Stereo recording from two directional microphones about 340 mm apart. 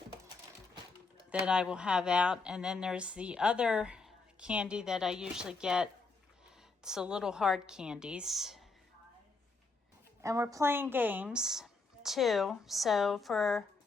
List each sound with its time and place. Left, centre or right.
1.3 s speech: centre
10.2 s speech: centre